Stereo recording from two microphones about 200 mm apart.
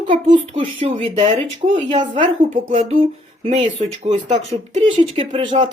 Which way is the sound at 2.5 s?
35° right (ahead or behind).